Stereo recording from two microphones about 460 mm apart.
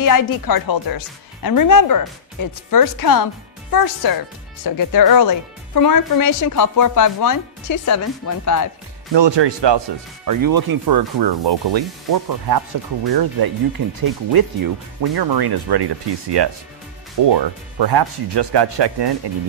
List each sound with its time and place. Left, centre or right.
0.0 s speech: left
9.1 s speech: right
10.2 s speech: right